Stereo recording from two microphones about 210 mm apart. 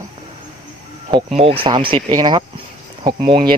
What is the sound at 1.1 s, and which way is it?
Speech, 25° right (ahead or behind).